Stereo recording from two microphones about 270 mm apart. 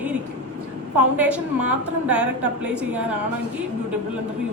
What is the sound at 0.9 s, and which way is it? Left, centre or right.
A woman's voice, centre.